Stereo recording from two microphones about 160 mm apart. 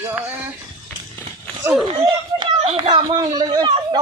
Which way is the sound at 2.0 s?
35° right (ahead or behind).